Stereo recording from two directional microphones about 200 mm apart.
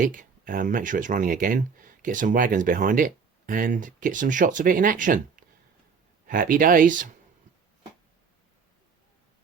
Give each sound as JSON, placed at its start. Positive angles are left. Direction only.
{"t": 0.0, "sound": "speech", "side_deg": -40}